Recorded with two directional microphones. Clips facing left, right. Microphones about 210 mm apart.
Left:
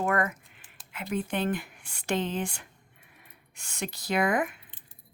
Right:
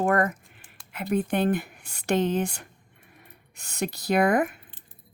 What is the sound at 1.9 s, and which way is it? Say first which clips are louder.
Speech: right 6 dB; 40° right (ahead or behind).